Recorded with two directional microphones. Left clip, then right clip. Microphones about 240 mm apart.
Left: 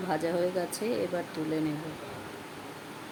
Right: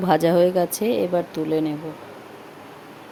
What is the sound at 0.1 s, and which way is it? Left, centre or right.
Speech, right.